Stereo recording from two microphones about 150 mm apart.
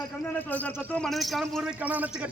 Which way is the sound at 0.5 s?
10° left (ahead or behind).